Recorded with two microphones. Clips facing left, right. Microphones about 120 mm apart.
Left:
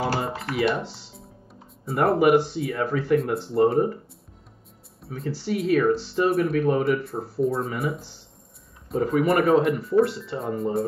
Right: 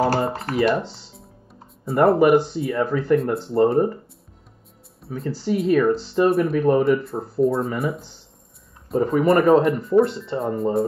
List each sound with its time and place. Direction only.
0.0 s a sound: 40° right (ahead or behind)
0.7 s music: centre (ahead or behind)
1.9 s speech: centre (ahead or behind)
5.0 s speech: centre (ahead or behind)